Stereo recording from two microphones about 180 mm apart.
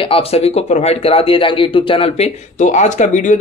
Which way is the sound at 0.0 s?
30° left (ahead or behind).